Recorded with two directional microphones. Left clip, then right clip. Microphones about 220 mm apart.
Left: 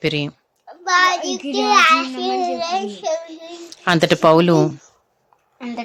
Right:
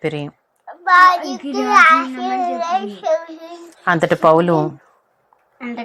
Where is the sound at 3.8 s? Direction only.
30° left (ahead or behind).